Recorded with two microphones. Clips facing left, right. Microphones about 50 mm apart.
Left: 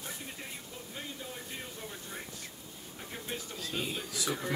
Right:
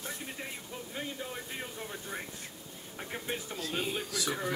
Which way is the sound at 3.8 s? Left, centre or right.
Centre.